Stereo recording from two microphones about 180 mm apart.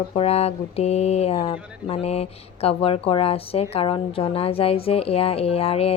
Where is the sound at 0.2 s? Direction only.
35° left (ahead or behind).